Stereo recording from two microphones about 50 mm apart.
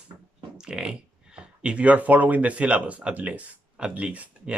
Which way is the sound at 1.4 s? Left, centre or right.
Centre.